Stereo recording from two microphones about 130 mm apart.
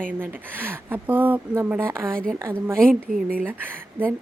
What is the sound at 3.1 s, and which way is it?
Speech, 90° right.